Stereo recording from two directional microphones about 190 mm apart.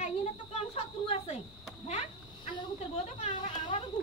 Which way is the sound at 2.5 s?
30° left (ahead or behind).